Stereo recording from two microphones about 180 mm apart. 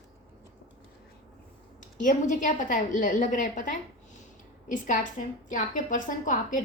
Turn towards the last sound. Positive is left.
turn(degrees=45)  # may be behind; listen again after turning